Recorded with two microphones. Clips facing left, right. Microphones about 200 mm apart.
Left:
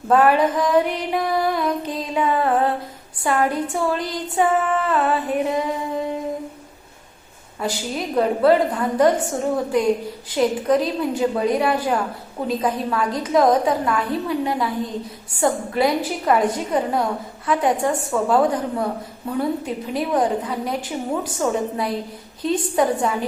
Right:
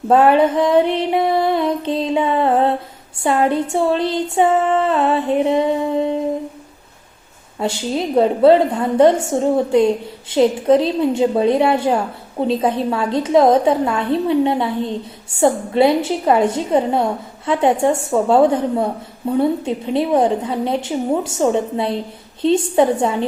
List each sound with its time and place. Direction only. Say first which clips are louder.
0.1 s a woman's voice: right 4 dB; 25° right (ahead or behind)
7.6 s a woman's voice: right 5 dB; 25° right (ahead or behind)